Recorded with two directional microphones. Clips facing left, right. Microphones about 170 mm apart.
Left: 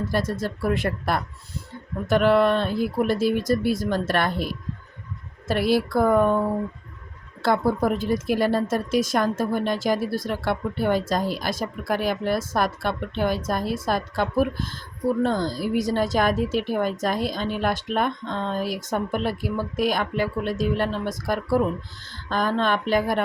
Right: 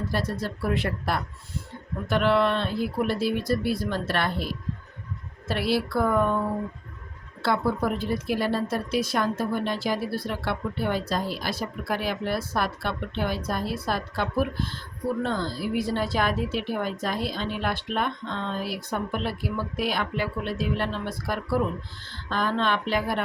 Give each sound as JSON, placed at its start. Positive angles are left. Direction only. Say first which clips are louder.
{"t": 0.3, "sound": "speech", "louder": "left 3 dB", "side_deg": 45}
{"t": 5.5, "sound": "speech", "louder": "left 4 dB", "side_deg": 45}
{"t": 7.4, "sound": "speech", "louder": "left 4 dB", "side_deg": 45}